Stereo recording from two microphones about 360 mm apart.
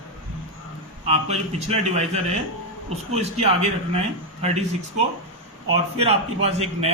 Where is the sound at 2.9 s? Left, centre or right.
Centre.